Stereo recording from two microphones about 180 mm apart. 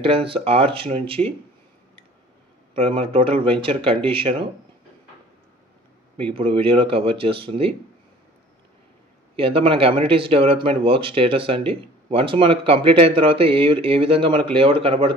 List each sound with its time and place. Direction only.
0.0 s speech: 30° right (ahead or behind)
2.7 s speech: 30° right (ahead or behind)
6.1 s speech: 30° right (ahead or behind)
9.4 s speech: 30° right (ahead or behind)